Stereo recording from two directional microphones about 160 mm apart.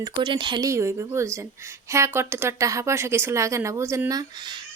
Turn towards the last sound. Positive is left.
turn(degrees=-30)  # may be behind; listen again after turning